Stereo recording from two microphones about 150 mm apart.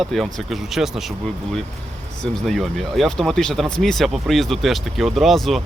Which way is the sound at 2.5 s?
Centre (ahead or behind).